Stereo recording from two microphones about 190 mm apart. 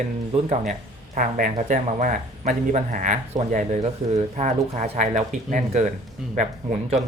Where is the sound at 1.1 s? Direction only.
45° right (ahead or behind).